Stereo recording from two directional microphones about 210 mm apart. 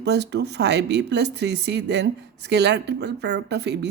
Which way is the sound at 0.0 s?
55° right (ahead or behind).